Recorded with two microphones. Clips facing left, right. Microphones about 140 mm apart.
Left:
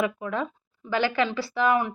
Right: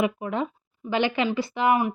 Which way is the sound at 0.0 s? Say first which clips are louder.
Right 2 dB; 20° right (ahead or behind).